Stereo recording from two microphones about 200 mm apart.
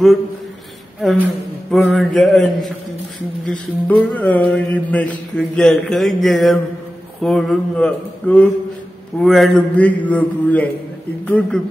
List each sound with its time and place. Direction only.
1.0 s a man's voice: centre (ahead or behind)
3.4 s mantra: 5° left (ahead or behind)
7.2 s a man's voice: centre (ahead or behind)
9.2 s mantra: centre (ahead or behind)